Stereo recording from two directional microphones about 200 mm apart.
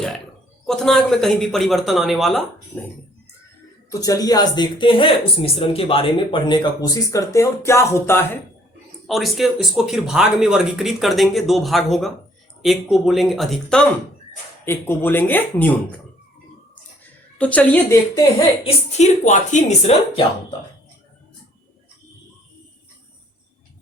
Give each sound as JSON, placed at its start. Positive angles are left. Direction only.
{"t": 0.6, "sound": "speech", "side_deg": 0}
{"t": 4.0, "sound": "speech", "side_deg": 20}
{"t": 9.0, "sound": "speech", "side_deg": 0}
{"t": 17.3, "sound": "speech", "side_deg": 5}
{"t": 18.6, "sound": "speech", "side_deg": 35}